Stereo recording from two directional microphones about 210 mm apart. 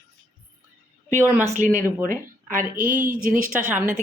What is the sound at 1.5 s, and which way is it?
Speech, 35° right (ahead or behind).